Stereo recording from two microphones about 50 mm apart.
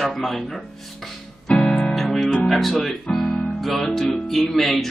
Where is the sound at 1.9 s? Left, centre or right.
Centre.